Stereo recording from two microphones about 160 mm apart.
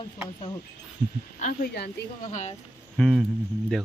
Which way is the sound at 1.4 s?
55° left (ahead or behind).